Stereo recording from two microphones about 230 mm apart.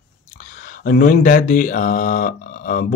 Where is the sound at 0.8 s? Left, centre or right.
Left.